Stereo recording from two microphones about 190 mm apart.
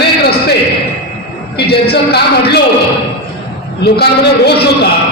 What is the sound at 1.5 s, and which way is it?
A man's voice, 60° left (ahead or behind).